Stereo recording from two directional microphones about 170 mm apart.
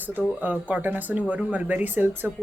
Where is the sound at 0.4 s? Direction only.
10° right (ahead or behind).